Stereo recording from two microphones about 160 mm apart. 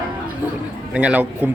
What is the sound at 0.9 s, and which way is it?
Speech, 5° right (ahead or behind).